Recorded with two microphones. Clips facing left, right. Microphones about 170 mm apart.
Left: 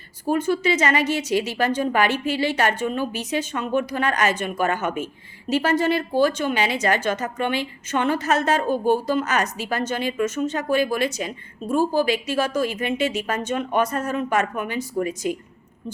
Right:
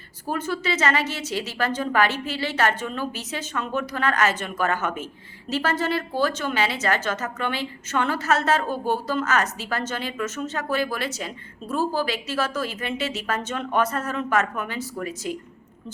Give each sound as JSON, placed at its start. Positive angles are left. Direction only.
{"t": 0.3, "sound": "a woman's voice", "side_deg": 15}